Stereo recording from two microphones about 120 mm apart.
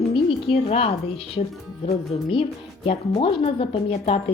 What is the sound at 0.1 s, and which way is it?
A woman's voice, 45° left (ahead or behind).